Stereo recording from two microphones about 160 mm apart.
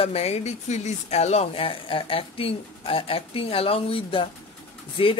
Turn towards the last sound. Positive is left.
turn(degrees=35)  # may be behind; listen again after turning